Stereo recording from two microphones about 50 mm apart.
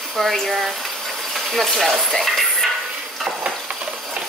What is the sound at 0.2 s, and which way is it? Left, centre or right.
Speech, centre.